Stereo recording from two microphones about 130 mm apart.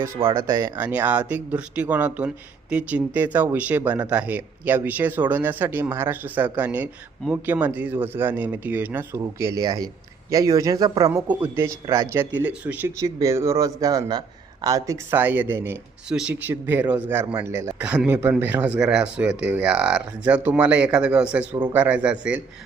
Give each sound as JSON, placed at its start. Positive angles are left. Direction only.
{"t": 0.2, "sound": "speech", "side_deg": -40}
{"t": 0.6, "sound": "speech", "side_deg": -15}
{"t": 11.1, "sound": "speech", "side_deg": -15}
{"t": 13.0, "sound": "a man's voice", "side_deg": -25}
{"t": 15.1, "sound": "speech", "side_deg": -15}
{"t": 16.0, "sound": "a man's voice", "side_deg": -5}
{"t": 17.7, "sound": "speech", "side_deg": -10}